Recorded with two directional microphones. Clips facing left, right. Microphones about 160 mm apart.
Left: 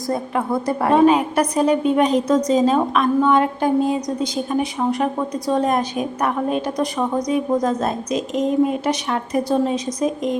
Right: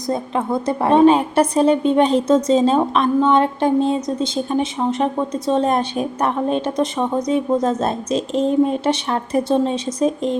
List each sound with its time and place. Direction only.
0.1 s a woman's voice: 20° right (ahead or behind)